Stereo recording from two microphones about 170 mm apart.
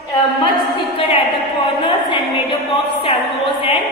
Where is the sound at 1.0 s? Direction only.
35° left (ahead or behind).